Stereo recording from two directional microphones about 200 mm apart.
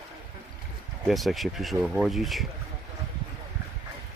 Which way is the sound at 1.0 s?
Centre (ahead or behind).